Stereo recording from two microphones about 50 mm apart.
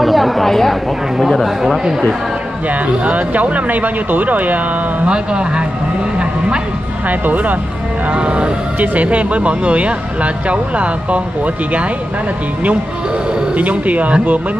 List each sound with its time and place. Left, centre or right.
0.0 s speech: centre
3.0 s speech: right
5.0 s speech: centre
7.1 s speech: right
8.1 s speech: right
13.6 s speech: right